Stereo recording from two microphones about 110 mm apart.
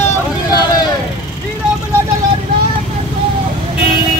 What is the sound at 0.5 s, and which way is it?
Speech, 35° left (ahead or behind).